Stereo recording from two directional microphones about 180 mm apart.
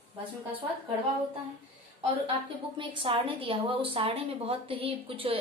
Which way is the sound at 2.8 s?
30° right (ahead or behind).